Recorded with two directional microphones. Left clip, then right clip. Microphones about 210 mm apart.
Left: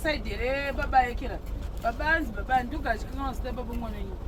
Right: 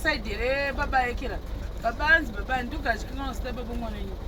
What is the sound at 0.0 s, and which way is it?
Speech, 5° right (ahead or behind).